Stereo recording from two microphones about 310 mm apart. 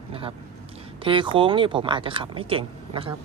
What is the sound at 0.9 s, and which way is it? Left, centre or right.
Speech, centre.